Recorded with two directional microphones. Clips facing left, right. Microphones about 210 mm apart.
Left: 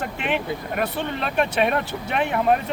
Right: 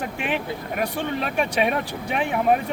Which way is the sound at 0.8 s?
10° right (ahead or behind).